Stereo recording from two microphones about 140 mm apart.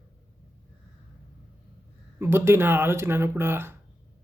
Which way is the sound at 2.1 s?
15° right (ahead or behind).